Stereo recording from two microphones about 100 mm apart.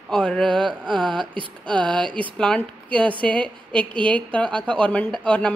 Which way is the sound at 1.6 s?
10° left (ahead or behind).